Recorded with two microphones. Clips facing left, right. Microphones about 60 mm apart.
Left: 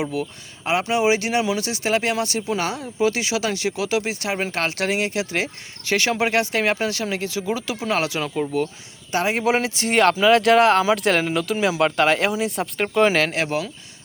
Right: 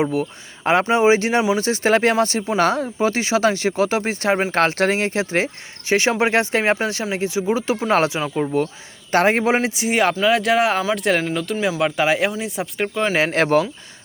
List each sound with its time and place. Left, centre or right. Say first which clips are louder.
0.0 s speech: right 5 dB; right
9.1 s speech: right 6 dB; right
9.4 s speech: right 2 dB; right; by 13.1 s centre
13.3 s speech: right 7 dB; right